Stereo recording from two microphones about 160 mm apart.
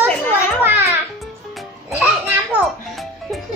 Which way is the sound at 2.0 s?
10° right (ahead or behind).